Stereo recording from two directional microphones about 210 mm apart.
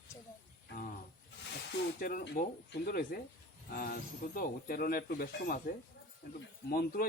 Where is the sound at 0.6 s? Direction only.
45° left (ahead or behind).